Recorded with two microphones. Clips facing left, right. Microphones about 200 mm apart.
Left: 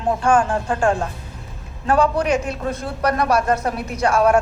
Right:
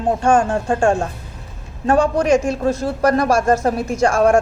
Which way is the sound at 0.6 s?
45° right (ahead or behind).